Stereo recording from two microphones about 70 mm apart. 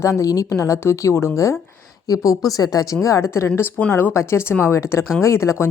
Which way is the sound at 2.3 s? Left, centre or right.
Left.